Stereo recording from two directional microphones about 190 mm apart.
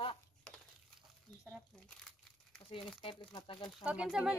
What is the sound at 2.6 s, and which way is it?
Crumpling, 30° left (ahead or behind).